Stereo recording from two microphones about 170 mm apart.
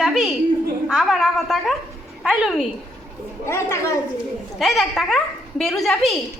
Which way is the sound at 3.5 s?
15° left (ahead or behind).